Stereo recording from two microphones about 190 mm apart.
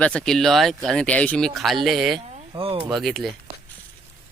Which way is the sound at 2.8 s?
Centre (ahead or behind).